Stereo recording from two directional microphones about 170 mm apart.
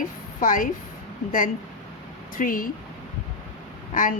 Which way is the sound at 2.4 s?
55° left (ahead or behind).